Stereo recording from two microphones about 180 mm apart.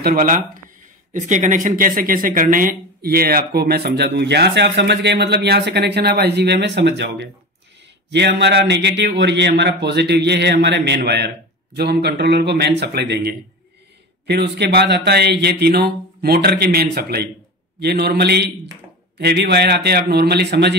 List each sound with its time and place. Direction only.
0.0 s a man's voice: 50° right (ahead or behind)